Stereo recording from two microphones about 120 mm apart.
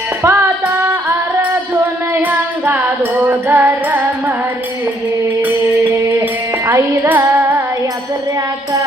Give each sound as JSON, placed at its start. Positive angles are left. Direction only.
{"t": 0.2, "sound": "music", "side_deg": -20}
{"t": 6.7, "sound": "music", "side_deg": -20}